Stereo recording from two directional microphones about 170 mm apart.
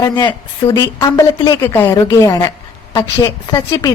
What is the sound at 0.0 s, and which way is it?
A woman's voice, 25° left (ahead or behind).